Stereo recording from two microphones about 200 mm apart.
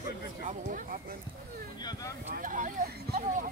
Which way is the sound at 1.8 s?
20° left (ahead or behind).